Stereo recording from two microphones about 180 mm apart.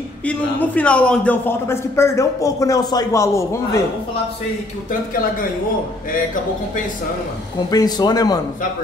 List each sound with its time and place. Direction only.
0.3 s a man's voice: 10° left (ahead or behind)
7.7 s speech: 20° left (ahead or behind)